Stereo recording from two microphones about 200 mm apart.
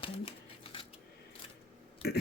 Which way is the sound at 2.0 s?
55° left (ahead or behind).